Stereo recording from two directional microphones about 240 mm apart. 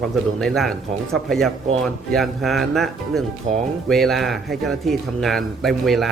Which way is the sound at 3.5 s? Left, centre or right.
Right.